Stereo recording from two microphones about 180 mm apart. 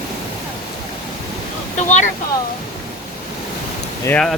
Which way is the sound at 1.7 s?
40° left (ahead or behind).